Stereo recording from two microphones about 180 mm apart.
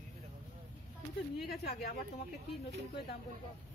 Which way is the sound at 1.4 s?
55° left (ahead or behind).